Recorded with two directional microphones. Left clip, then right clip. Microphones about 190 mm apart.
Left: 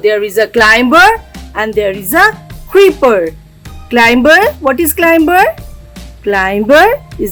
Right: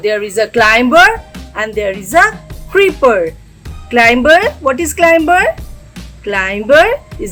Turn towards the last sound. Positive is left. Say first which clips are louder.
# left 2 dB
turn(degrees=45)  # may be behind; listen again after turning